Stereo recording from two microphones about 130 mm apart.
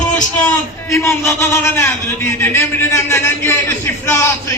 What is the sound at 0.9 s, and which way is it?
A man's voice, 20° left (ahead or behind).